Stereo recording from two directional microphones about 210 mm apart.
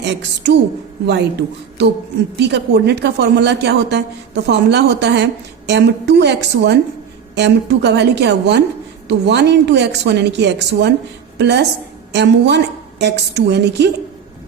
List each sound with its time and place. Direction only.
0.0 s a woman's voice: 55° right (ahead or behind)